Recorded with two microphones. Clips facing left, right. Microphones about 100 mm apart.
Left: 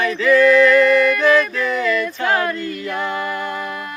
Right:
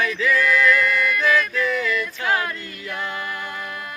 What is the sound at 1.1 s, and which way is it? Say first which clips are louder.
Music: left 5 dB; 5° right (ahead or behind).